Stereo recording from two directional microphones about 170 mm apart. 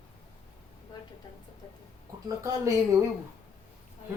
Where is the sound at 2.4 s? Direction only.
20° right (ahead or behind).